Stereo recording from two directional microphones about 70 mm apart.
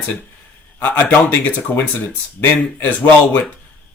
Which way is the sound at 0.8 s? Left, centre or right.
Left.